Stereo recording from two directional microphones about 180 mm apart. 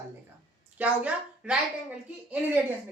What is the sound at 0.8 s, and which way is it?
A woman's voice, 5° right (ahead or behind).